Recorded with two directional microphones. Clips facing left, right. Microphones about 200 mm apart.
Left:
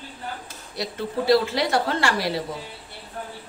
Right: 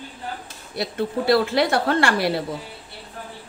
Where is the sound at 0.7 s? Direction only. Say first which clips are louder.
Right 4 dB; 60° right (ahead or behind).